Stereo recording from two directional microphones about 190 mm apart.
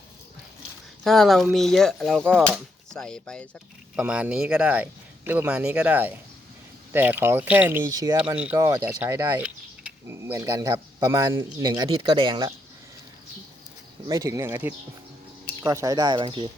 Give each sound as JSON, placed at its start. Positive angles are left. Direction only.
{"t": 1.0, "sound": "speech", "side_deg": 0}
{"t": 8.1, "sound": "speech", "side_deg": -5}
{"t": 14.1, "sound": "speech", "side_deg": -20}